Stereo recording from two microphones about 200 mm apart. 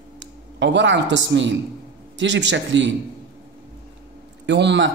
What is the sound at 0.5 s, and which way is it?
Speech, 60° right (ahead or behind).